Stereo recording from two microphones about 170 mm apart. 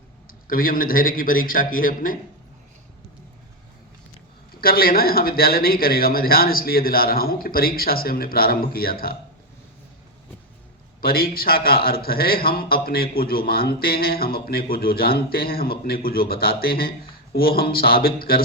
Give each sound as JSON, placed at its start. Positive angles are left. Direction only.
{"t": 0.3, "sound": "a man's voice", "side_deg": 55}
{"t": 4.6, "sound": "a man's voice", "side_deg": 60}
{"t": 11.0, "sound": "a man's voice", "side_deg": 60}